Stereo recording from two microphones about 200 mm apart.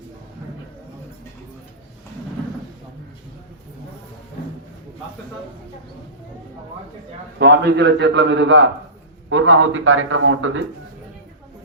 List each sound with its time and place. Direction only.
7.3 s a man's voice: 55° right (ahead or behind); by 10.6 s 80° right